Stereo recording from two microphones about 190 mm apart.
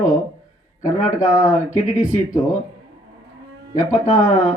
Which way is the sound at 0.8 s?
40° left (ahead or behind).